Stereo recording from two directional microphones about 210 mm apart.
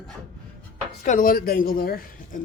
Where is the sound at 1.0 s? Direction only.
40° left (ahead or behind).